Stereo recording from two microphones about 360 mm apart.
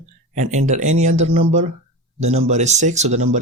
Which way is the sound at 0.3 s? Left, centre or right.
Centre.